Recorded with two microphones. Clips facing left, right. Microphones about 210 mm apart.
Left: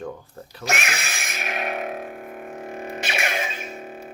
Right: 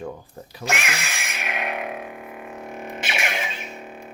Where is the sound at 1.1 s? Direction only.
40° left (ahead or behind).